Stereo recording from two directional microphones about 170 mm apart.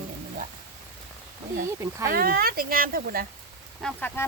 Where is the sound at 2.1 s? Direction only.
60° right (ahead or behind).